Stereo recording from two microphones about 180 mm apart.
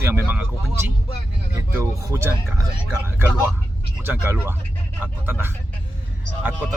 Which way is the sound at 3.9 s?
10° right (ahead or behind).